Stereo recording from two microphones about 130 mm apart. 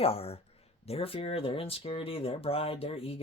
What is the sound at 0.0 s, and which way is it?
Speech, 50° left (ahead or behind).